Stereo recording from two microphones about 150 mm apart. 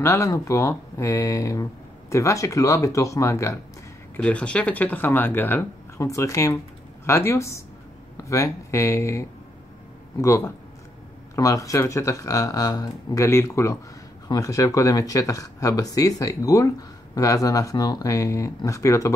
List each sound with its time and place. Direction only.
0.0 s speech: 20° left (ahead or behind)
4.2 s speech: 10° left (ahead or behind)